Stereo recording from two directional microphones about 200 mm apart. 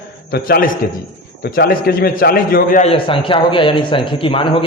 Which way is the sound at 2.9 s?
25° left (ahead or behind).